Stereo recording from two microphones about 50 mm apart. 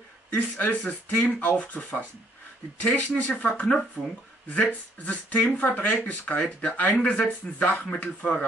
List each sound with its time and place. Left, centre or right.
0.3 s speech: left